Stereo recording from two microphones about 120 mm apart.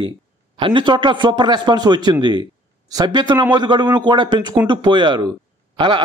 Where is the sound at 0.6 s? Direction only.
45° right (ahead or behind).